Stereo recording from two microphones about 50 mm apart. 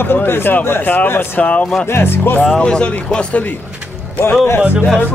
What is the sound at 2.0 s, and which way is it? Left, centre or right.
Speech, left.